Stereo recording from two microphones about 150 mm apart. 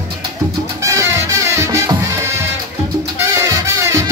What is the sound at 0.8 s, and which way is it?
Music, 20° right (ahead or behind).